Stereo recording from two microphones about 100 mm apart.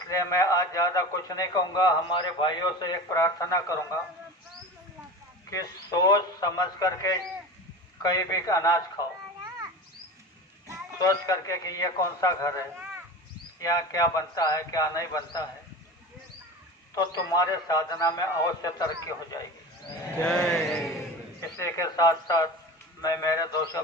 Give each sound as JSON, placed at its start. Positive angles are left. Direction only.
{"t": 0.1, "sound": "a man's voice", "side_deg": 35}
{"t": 5.5, "sound": "a man's voice", "side_deg": 35}
{"t": 11.0, "sound": "a man's voice", "side_deg": 35}
{"t": 16.9, "sound": "a man's voice", "side_deg": 40}
{"t": 20.2, "sound": "speech", "side_deg": 5}
{"t": 21.6, "sound": "speech", "side_deg": 25}
{"t": 21.9, "sound": "a man's voice", "side_deg": 40}